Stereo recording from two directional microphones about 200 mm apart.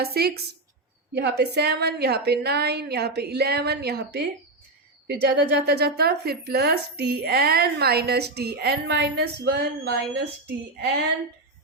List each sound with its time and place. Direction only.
0.0 s a woman's voice: 50° right (ahead or behind)